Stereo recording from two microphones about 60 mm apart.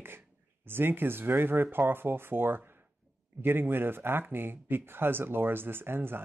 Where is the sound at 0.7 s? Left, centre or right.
Right.